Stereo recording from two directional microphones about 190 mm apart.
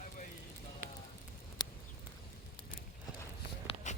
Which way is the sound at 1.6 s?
20° left (ahead or behind).